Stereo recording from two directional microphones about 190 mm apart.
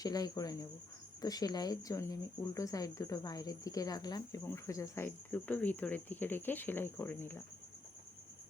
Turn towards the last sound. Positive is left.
turn(degrees=10)  # may be behind; listen again after turning